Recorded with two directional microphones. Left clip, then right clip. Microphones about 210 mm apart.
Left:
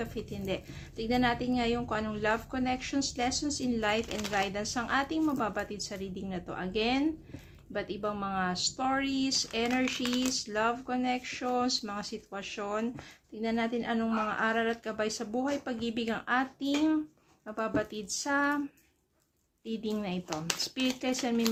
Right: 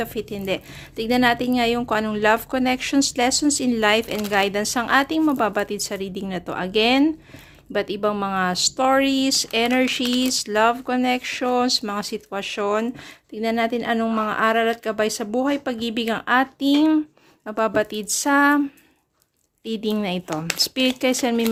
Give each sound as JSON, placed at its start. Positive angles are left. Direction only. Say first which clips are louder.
{"t": 0.0, "sound": "a woman's voice", "louder": "right 11 dB", "side_deg": -50}
{"t": 19.6, "sound": "a woman's voice", "louder": "right 11 dB", "side_deg": -50}